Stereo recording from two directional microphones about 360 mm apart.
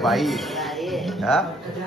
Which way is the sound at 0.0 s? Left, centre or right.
Centre.